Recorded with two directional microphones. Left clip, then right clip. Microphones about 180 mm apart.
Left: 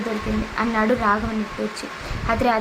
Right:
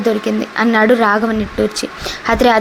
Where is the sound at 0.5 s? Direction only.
35° right (ahead or behind).